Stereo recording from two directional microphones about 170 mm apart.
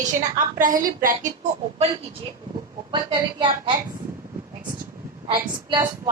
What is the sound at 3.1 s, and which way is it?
Speech, 25° right (ahead or behind).